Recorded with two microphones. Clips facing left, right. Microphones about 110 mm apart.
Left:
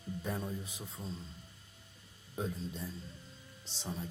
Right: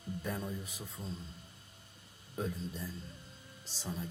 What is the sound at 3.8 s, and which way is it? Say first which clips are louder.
Speech: even; 5° left (ahead or behind).